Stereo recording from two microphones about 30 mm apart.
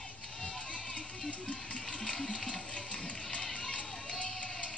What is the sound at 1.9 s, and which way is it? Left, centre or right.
Music, left.